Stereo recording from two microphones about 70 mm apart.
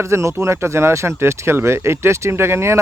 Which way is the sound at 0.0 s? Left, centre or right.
Right.